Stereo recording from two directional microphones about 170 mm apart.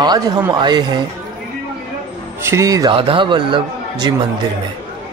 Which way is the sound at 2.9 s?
30° right (ahead or behind).